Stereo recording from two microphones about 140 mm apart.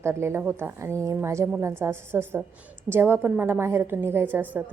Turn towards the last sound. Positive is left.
turn(degrees=-15)  # may be behind; listen again after turning